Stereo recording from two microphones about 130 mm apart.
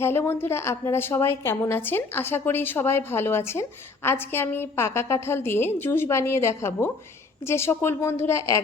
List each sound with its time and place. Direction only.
0.0 s a woman's voice: 20° left (ahead or behind)